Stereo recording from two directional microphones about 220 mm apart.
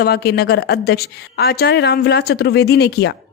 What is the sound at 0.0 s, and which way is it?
Speech, 45° left (ahead or behind).